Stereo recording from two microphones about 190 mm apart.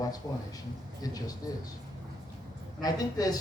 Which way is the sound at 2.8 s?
20° left (ahead or behind).